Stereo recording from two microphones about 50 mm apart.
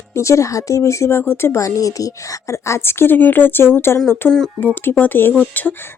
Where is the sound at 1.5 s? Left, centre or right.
Left.